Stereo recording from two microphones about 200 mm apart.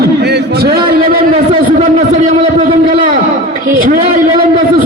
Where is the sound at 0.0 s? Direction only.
55° right (ahead or behind).